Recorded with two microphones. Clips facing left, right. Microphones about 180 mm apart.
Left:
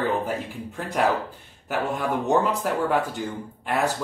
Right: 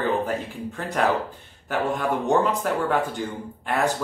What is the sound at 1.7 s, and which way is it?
Speech, 5° left (ahead or behind).